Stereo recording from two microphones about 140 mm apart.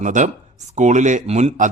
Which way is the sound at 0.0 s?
60° right (ahead or behind).